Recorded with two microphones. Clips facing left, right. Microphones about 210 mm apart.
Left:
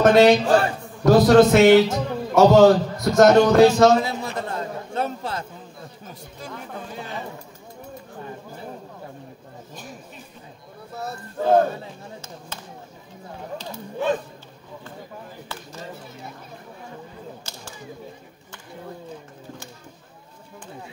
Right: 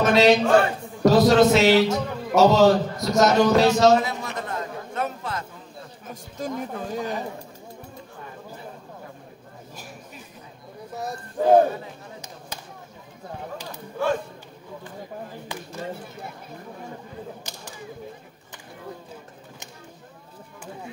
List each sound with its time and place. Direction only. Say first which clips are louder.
0.0 s a man's voice: left 3 dB; 55° left (ahead or behind)
4.0 s a sound: left 2 dB; 30° left (ahead or behind)
6.3 s speech: right 7 dB; 45° right (ahead or behind)
11.0 s speech: right 2 dB; 15° right (ahead or behind)
14.0 s speech: left 1 dB; 20° left (ahead or behind)